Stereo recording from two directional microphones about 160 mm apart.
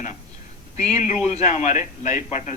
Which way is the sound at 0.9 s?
45° left (ahead or behind).